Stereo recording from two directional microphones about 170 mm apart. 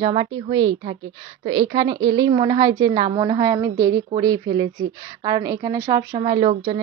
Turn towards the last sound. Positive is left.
turn(degrees=-30)  # may be behind; listen again after turning